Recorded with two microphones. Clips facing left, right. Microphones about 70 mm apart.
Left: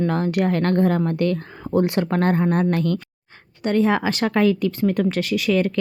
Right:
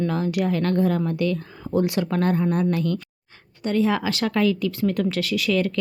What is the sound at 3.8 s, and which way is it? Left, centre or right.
Speech, left.